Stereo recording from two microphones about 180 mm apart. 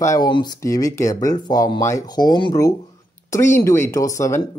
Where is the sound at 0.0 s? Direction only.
20° left (ahead or behind).